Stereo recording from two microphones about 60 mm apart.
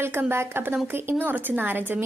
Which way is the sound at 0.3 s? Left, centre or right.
Right.